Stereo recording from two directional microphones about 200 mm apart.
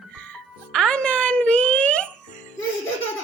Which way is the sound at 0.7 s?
5° left (ahead or behind).